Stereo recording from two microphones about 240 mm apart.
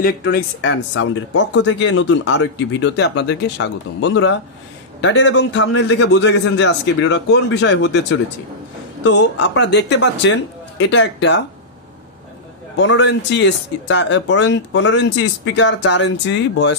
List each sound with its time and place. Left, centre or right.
0.0 s speech: left
12.7 s speech: left